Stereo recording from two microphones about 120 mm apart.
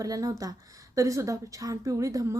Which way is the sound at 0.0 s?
30° right (ahead or behind).